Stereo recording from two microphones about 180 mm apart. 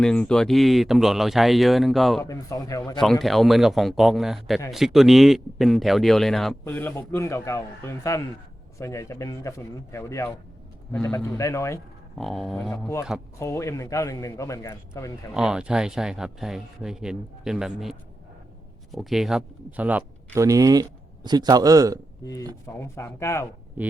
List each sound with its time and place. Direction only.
0.0 s speech: 5° left (ahead or behind)
2.2 s speech: 20° left (ahead or behind)
3.0 s a man's voice: centre (ahead or behind)
12.1 s speech: centre (ahead or behind)
13.4 s a man's voice: 15° left (ahead or behind)
15.3 s a man's voice: 5° right (ahead or behind)
22.2 s a man's voice: 20° left (ahead or behind)